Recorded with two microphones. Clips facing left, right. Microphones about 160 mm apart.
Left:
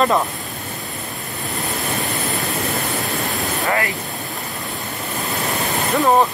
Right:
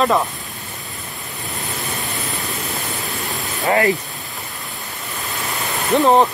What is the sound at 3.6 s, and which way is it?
Speech, 25° right (ahead or behind).